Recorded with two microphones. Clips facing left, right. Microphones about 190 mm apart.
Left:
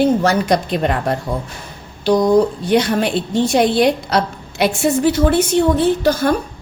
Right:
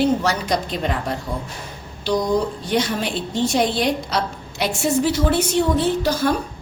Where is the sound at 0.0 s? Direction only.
50° left (ahead or behind).